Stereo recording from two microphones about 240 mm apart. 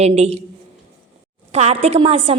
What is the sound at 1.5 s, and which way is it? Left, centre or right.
Speech, right.